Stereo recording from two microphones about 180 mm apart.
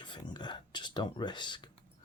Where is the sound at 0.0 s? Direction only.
25° left (ahead or behind).